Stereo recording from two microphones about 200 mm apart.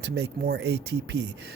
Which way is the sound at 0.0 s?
60° right (ahead or behind).